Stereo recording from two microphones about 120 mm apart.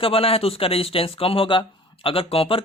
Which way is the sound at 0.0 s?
50° left (ahead or behind).